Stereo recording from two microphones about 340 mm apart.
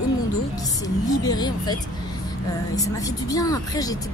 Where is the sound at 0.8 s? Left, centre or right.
Centre.